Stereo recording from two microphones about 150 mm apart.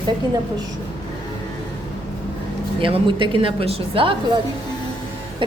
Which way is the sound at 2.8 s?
35° right (ahead or behind).